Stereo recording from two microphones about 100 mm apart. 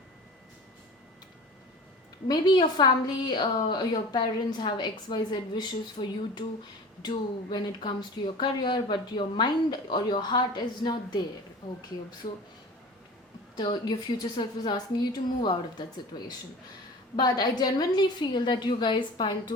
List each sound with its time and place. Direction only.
2.2 s speech: 45° left (ahead or behind)
12.2 s speech: 90° left
13.6 s speech: 45° left (ahead or behind)